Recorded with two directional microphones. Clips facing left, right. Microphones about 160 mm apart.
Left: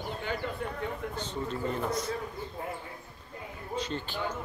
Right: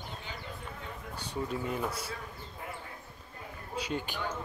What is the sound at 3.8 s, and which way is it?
Speech, 10° right (ahead or behind).